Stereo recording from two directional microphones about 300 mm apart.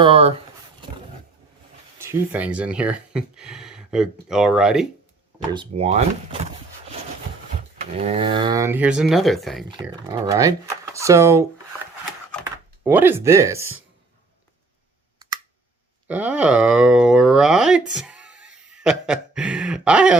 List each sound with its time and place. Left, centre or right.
0.0 s speech: centre
2.0 s speech: centre
5.5 s speech: centre
7.8 s speech: right; by 9.6 s centre
9.8 s speech: centre
12.8 s speech: centre
16.0 s speech: centre
18.7 s a sound: centre